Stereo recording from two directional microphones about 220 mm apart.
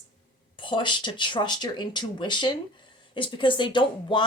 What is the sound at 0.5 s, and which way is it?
A woman's voice, 20° left (ahead or behind).